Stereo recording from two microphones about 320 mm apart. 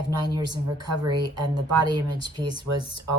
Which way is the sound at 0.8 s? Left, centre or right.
Right.